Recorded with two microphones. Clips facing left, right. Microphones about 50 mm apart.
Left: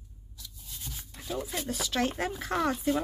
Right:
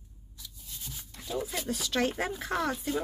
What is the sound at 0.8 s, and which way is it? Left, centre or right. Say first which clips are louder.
Speech: left 1 dB; centre.